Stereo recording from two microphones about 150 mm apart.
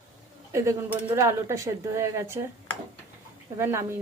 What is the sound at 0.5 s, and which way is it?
Speech, 20° right (ahead or behind).